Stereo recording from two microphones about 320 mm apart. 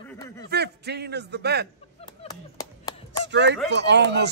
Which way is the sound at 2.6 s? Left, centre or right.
Centre.